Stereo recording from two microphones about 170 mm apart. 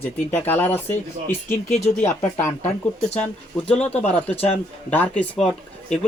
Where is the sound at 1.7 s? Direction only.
45° left (ahead or behind).